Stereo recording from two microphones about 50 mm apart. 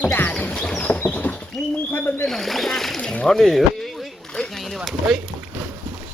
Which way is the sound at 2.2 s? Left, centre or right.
Centre.